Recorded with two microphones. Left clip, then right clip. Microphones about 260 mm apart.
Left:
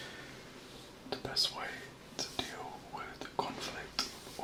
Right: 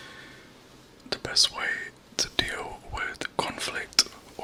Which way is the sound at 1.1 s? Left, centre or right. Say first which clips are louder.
Right 10 dB; right.